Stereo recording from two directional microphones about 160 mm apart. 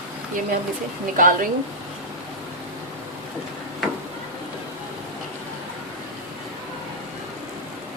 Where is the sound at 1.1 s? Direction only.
60° right (ahead or behind).